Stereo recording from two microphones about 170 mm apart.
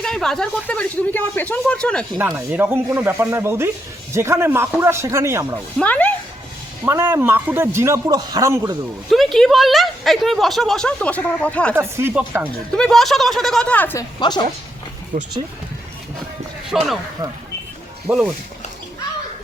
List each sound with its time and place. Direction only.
0.0 s speech: 5° left (ahead or behind)
2.5 s speech: 10° right (ahead or behind)
5.8 s speech: 10° left (ahead or behind)
6.8 s speech: 15° right (ahead or behind)
9.0 s speech: centre (ahead or behind)
11.7 s speech: 15° right (ahead or behind)
12.7 s speech: 5° left (ahead or behind)
14.2 s a woman's voice: 25° left (ahead or behind)
15.1 s speech: 40° right (ahead or behind)
16.7 s speech: 5° right (ahead or behind)
18.1 s speech: 5° right (ahead or behind)